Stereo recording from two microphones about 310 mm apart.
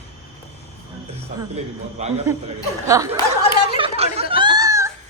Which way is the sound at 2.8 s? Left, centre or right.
Centre.